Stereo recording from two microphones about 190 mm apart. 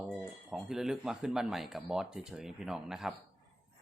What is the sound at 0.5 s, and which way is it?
A man's voice, centre (ahead or behind).